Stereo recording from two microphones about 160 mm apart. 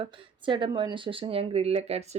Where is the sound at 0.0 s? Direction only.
30° right (ahead or behind).